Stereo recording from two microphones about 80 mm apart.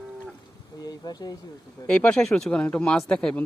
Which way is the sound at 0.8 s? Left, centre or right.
Left.